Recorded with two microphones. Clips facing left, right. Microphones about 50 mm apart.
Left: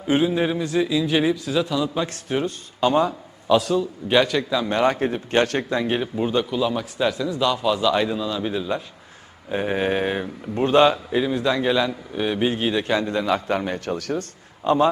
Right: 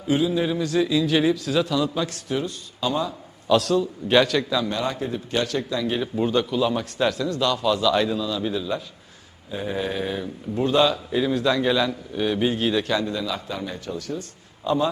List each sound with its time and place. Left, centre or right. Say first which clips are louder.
0.1 s speech: left 2 dB; left
0.5 s a man's voice: even; left
2.0 s speech: left 2 dB; left
3.5 s a man's voice: left 1 dB; centre
4.7 s speech: left 6 dB; left
6.0 s a man's voice: even; centre
9.5 s speech: left 5 dB; left
11.1 s a man's voice: even; centre; by 14.3 s left
14.6 s a man's voice: left 4 dB; left